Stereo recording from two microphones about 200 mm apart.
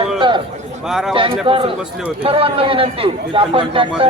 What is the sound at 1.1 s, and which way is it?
Speech, 25° right (ahead or behind).